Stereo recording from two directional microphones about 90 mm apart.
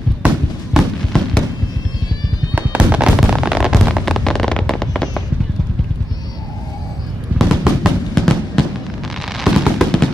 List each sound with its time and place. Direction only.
0.7 s fireworks: 5° left (ahead or behind)
2.5 s music: 15° right (ahead or behind)
4.0 s fireworks: 5° left (ahead or behind)
7.3 s fireworks: 5° left (ahead or behind)
9.4 s fireworks: 5° left (ahead or behind)